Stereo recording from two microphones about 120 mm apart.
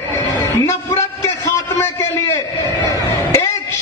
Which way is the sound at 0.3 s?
25° left (ahead or behind).